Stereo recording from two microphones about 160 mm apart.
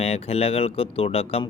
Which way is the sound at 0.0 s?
40° left (ahead or behind).